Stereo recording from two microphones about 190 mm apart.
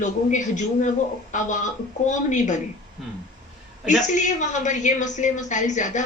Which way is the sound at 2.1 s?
40° left (ahead or behind).